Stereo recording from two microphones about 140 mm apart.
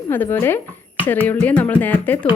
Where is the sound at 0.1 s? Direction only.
15° left (ahead or behind).